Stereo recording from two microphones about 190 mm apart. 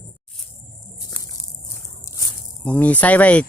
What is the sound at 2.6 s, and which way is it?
Speech, 5° left (ahead or behind).